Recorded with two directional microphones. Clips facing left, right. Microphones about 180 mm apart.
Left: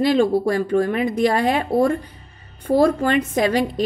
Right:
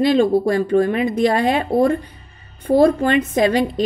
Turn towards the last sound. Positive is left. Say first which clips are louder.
# right 2 dB
turn(degrees=-20)  # may be behind; listen again after turning